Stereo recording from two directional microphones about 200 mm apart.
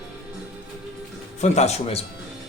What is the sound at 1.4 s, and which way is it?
Speech, 35° left (ahead or behind).